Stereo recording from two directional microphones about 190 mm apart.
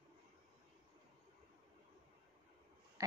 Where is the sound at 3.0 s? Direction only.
15° right (ahead or behind).